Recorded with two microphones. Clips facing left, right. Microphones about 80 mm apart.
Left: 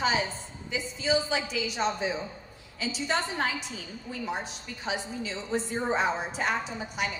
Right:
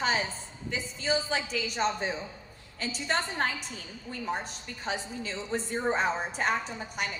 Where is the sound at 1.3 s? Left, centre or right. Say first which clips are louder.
Left 1 dB; right.